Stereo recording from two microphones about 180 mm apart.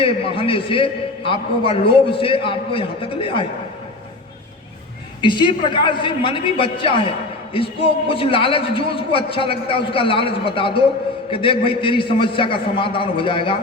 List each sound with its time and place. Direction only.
0.0 s a man's voice: 30° left (ahead or behind)
5.2 s a man's voice: 25° left (ahead or behind)